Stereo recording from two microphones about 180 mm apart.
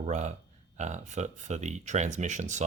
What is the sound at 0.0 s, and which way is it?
Speech, 40° right (ahead or behind).